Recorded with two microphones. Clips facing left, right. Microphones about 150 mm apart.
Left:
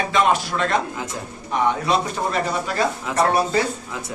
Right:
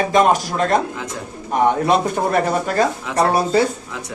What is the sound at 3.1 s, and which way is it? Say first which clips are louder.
Speech: right 2 dB; 35° right (ahead or behind).